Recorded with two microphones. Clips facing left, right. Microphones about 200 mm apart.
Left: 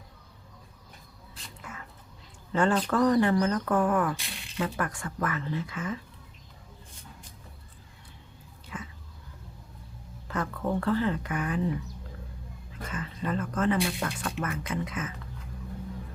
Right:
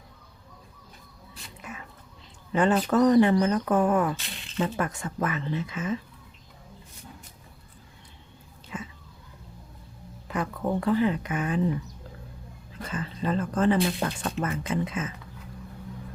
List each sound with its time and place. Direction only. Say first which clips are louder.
2.5 s speech: right 3 dB; 20° right (ahead or behind)
8.7 s a sound: right 3 dB; 25° right (ahead or behind)
10.2 s speech: right 2 dB; 15° right (ahead or behind)
12.9 s speech: right 3 dB; 30° right (ahead or behind)